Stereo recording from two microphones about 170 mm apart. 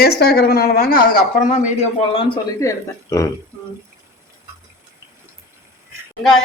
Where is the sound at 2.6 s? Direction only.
20° left (ahead or behind).